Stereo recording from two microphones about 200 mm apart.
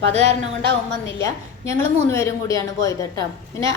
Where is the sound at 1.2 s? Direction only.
15° left (ahead or behind).